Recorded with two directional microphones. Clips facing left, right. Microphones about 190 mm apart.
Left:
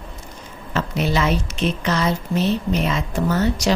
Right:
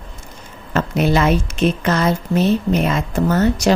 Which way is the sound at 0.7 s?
50° right (ahead or behind).